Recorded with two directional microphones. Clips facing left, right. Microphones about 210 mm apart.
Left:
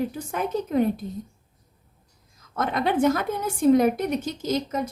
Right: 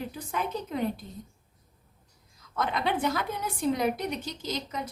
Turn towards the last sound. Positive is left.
turn(degrees=50)  # may be behind; listen again after turning